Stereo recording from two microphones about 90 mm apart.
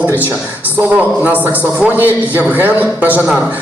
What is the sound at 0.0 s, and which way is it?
A woman's voice, 20° right (ahead or behind).